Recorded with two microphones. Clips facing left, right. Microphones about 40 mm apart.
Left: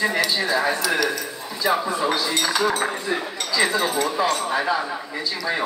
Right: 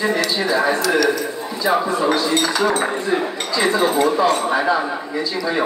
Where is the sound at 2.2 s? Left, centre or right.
Centre.